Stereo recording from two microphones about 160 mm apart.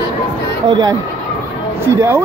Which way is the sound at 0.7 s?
25° right (ahead or behind).